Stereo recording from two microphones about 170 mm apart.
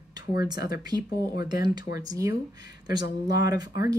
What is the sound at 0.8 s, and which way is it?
Speech, 25° right (ahead or behind).